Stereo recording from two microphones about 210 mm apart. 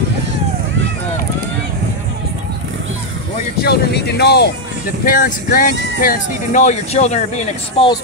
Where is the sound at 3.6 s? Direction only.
50° left (ahead or behind).